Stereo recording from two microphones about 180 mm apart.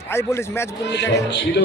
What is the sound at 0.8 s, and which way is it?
Speech, 75° left (ahead or behind).